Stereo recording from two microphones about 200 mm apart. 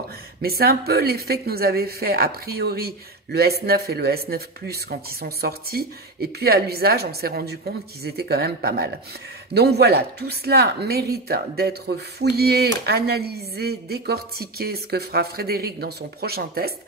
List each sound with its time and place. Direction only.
0.4 s speech: 50° right (ahead or behind)